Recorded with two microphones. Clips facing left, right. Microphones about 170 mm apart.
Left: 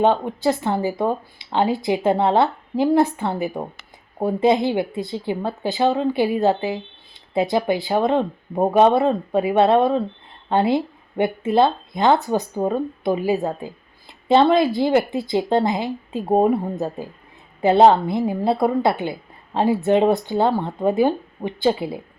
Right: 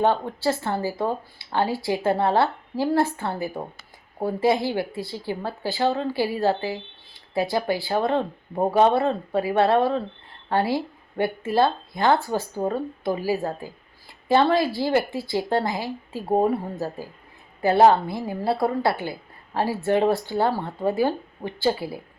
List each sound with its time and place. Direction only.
0.0 s speech: 20° left (ahead or behind)